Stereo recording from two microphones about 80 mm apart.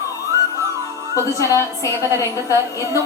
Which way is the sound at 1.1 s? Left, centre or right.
Left.